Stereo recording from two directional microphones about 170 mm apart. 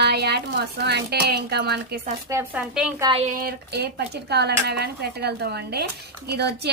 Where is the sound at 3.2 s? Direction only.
60° right (ahead or behind); by 6.6 s 75° right (ahead or behind).